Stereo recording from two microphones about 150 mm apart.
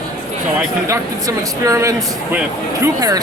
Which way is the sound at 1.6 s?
20° right (ahead or behind).